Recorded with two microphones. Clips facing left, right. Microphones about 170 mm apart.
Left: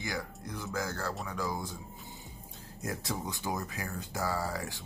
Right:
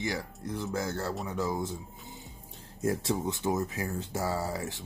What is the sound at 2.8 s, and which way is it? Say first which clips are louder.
Speech: right 7 dB; 25° right (ahead or behind).